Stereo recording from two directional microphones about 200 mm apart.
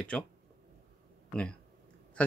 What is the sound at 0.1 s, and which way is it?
Speech, 5° left (ahead or behind).